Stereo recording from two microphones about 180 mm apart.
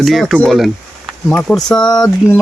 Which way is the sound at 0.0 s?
Centre (ahead or behind).